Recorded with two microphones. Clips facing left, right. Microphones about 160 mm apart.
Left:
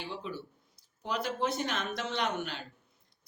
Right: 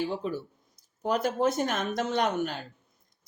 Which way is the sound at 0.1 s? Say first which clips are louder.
Right 7 dB; 45° right (ahead or behind).